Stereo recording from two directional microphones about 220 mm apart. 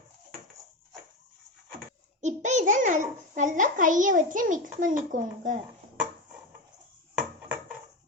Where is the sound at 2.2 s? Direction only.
35° right (ahead or behind).